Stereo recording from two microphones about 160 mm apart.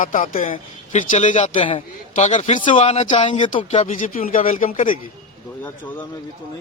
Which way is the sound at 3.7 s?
50° left (ahead or behind).